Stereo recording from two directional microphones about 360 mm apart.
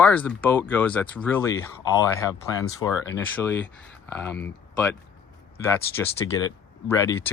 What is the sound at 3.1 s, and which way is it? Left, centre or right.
Speech, centre.